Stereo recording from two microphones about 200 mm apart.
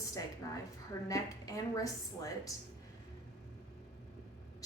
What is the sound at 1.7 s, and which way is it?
Speech, 15° left (ahead or behind).